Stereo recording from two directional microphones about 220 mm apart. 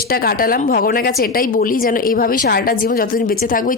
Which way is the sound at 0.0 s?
45° left (ahead or behind).